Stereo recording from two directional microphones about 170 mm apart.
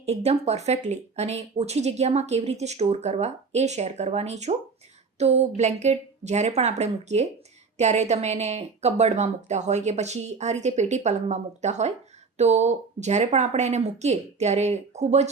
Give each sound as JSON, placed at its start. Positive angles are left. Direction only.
{"t": 0.0, "sound": "speech", "side_deg": -40}